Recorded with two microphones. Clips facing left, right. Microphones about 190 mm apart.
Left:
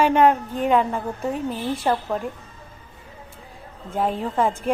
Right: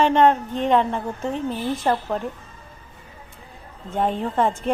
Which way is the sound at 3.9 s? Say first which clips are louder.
Right 1 dB; 5° left (ahead or behind).